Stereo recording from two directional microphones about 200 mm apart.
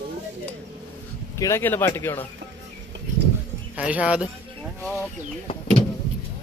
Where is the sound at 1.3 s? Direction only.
15° left (ahead or behind).